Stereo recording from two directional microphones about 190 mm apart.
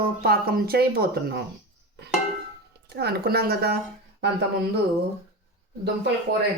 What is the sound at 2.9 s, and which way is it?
Speech, 55° right (ahead or behind).